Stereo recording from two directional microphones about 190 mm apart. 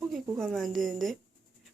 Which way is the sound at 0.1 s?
Centre (ahead or behind).